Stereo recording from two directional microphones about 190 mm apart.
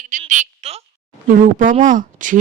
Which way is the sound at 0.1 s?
40° right (ahead or behind).